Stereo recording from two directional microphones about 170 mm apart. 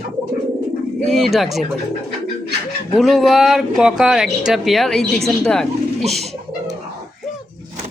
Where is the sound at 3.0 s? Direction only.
Centre (ahead or behind).